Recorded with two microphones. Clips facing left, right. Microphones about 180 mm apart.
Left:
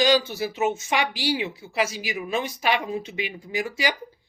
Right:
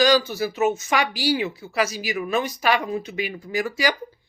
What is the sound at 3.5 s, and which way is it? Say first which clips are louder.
Speech: right 3 dB; 45° right (ahead or behind).